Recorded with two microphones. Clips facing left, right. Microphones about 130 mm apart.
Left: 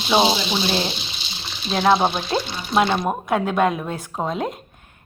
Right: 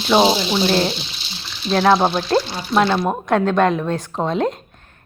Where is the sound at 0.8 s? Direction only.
20° left (ahead or behind).